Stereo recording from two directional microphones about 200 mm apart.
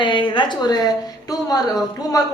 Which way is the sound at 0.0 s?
25° left (ahead or behind).